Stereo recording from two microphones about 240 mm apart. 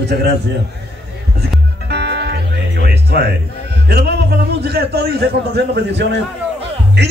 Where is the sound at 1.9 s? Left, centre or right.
Right.